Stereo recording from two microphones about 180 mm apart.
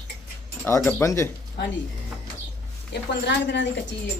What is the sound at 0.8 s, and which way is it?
Speech, 10° left (ahead or behind).